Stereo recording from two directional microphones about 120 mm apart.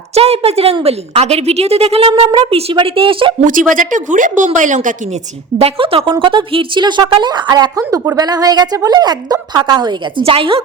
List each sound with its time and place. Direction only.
0.1 s a woman's voice: 55° right (ahead or behind)
3.7 s a woman's voice: 90° right
5.5 s a woman's voice: 50° right (ahead or behind); by 7.7 s 35° right (ahead or behind)
7.8 s a woman's voice: 25° right (ahead or behind)
10.2 s a woman's voice: 50° right (ahead or behind)